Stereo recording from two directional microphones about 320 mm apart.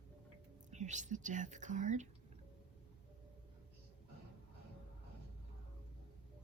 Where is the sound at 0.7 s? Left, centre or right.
Right.